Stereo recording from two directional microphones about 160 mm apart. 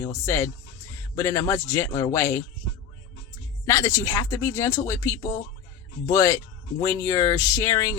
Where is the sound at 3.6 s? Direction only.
20° left (ahead or behind).